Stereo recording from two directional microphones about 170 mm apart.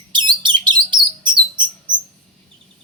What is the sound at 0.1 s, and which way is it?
Bird, 25° right (ahead or behind).